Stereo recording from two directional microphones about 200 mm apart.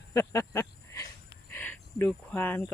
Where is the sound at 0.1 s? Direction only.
15° left (ahead or behind).